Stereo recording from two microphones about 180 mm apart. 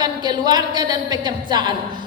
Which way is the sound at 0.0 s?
25° right (ahead or behind).